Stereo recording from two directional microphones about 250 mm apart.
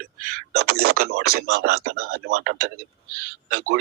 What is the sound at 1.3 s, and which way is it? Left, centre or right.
Speech, right.